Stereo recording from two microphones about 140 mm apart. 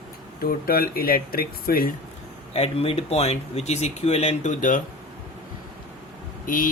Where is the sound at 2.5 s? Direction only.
45° left (ahead or behind); by 4.8 s 70° left (ahead or behind).